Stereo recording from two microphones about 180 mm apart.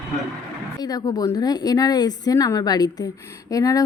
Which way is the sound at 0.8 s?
20° left (ahead or behind).